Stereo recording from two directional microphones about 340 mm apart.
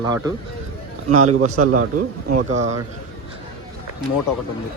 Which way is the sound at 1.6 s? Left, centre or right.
Right.